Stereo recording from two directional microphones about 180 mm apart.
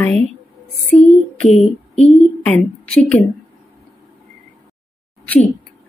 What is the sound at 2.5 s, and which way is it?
Speech, 5° left (ahead or behind).